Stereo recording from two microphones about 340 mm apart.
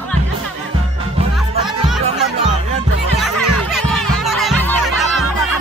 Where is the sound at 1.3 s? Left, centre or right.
Centre.